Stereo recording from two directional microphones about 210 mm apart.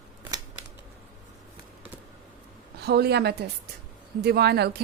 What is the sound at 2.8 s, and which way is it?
Speech, 50° right (ahead or behind).